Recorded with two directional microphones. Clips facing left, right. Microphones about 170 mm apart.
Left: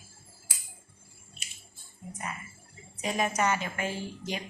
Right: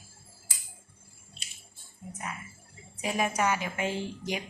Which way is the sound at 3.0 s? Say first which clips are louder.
Even; 10° right (ahead or behind).